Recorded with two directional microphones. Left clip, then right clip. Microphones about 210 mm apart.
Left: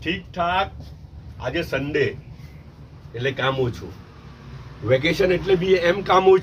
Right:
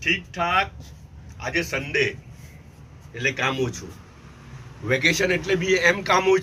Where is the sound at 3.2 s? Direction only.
15° left (ahead or behind).